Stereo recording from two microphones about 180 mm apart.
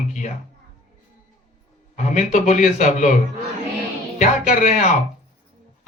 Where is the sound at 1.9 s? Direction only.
40° left (ahead or behind).